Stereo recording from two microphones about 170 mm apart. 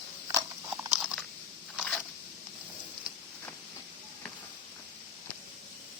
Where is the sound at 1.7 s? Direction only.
Centre (ahead or behind).